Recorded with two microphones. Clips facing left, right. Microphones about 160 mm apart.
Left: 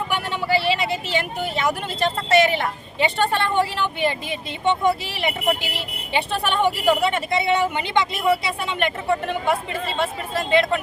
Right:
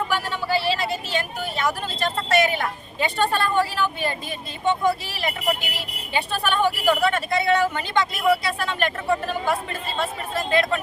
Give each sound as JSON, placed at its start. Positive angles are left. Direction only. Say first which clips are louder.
{"t": 0.1, "sound": "a sound", "louder": "left 1 dB", "side_deg": 20}
{"t": 0.9, "sound": "vehicle", "louder": "left 2 dB", "side_deg": 20}
{"t": 2.0, "sound": "speech", "louder": "left 3 dB", "side_deg": 25}